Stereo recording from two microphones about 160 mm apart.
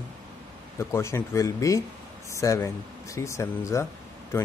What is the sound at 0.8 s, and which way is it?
Speech, 15° left (ahead or behind).